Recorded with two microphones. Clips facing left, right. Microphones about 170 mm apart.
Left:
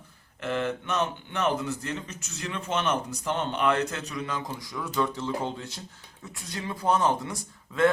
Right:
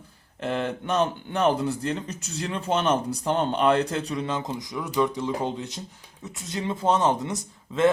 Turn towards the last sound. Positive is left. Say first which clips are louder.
# right 2 dB
turn(degrees=-20)  # may be behind; listen again after turning